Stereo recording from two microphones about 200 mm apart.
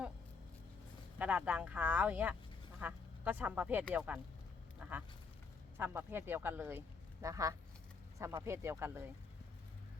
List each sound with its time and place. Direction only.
1.2 s speech: 5° right (ahead or behind)